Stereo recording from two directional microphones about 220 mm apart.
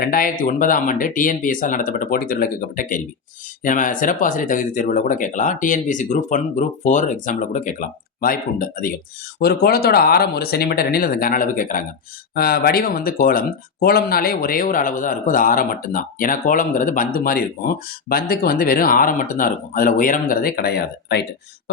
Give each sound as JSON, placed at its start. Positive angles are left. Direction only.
{"t": 0.0, "sound": "speech", "side_deg": 40}